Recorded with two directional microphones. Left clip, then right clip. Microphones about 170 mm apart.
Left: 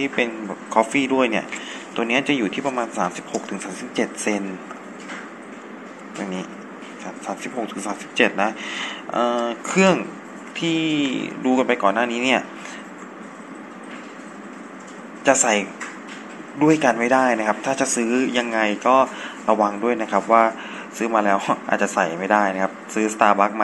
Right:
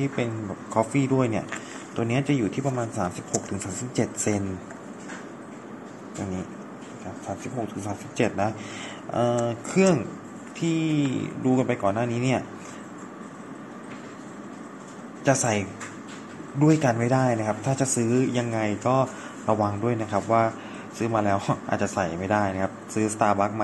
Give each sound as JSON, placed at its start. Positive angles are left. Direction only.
{"t": 0.0, "sound": "a man's voice", "side_deg": -5}
{"t": 3.3, "sound": "speech", "side_deg": -15}
{"t": 7.4, "sound": "a man's voice", "side_deg": 0}
{"t": 15.2, "sound": "a man's voice", "side_deg": -5}